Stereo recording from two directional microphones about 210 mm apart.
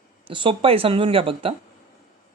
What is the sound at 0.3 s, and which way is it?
Speech, 25° right (ahead or behind).